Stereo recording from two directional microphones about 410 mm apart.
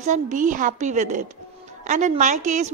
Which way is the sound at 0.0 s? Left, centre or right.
Centre.